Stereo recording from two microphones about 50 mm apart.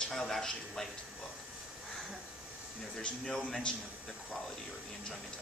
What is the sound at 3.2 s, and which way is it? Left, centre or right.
Speech, centre.